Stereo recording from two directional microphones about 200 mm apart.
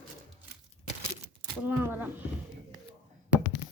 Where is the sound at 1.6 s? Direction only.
10° right (ahead or behind).